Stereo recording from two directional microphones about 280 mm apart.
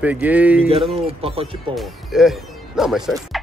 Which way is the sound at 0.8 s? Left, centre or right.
Right.